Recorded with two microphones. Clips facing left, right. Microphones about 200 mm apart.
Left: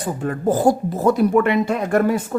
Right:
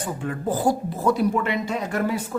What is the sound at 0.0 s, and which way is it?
Speech, 40° left (ahead or behind).